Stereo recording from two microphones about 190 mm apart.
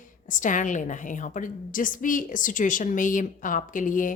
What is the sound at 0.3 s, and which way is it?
A woman's voice, 40° left (ahead or behind).